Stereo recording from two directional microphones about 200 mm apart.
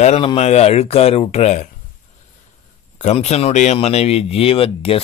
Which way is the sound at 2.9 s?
35° left (ahead or behind).